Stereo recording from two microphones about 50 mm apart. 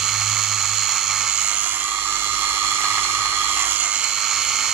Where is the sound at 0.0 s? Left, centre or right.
Centre.